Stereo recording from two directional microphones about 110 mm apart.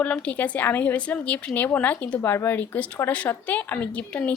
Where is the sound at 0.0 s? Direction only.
15° left (ahead or behind).